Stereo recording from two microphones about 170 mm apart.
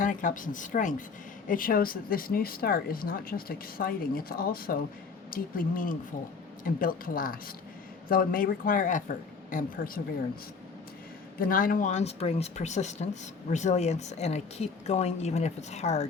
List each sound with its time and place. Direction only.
0.0 s speech: 50° left (ahead or behind)
11.3 s speech: 55° left (ahead or behind); by 16.0 s 40° left (ahead or behind)